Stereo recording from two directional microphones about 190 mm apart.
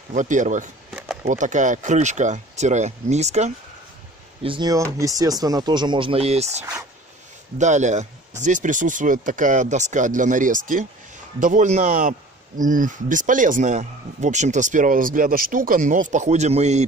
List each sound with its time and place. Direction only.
0.1 s speech: 40° right (ahead or behind)
4.4 s speech: 25° right (ahead or behind)